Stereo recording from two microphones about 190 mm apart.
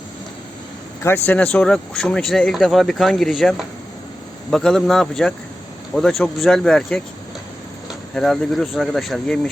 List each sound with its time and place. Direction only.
1.0 s speech: 10° left (ahead or behind)
8.1 s speech: centre (ahead or behind)